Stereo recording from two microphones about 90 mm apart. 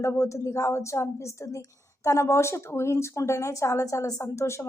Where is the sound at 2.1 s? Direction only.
35° left (ahead or behind).